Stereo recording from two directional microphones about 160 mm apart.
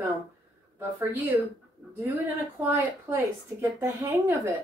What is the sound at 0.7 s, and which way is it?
Speech, 10° right (ahead or behind).